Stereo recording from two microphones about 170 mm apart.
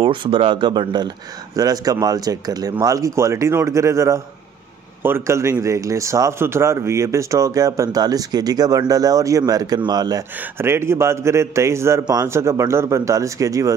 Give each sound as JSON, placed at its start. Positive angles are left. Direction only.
{"t": 0.0, "sound": "speech", "side_deg": -30}